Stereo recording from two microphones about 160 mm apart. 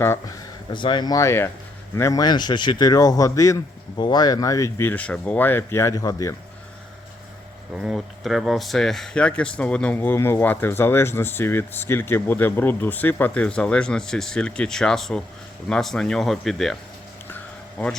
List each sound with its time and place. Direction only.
0.0 s speech: 15° left (ahead or behind)
0.7 s speech: 30° left (ahead or behind)
7.8 s speech: centre (ahead or behind)
17.2 s a sound: 10° left (ahead or behind)